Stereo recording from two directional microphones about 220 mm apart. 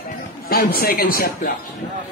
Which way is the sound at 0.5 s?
40° left (ahead or behind).